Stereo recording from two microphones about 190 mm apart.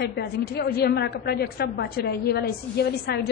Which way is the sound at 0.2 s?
55° left (ahead or behind).